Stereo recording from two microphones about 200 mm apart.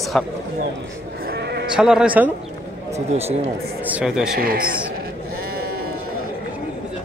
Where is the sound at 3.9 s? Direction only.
5° right (ahead or behind).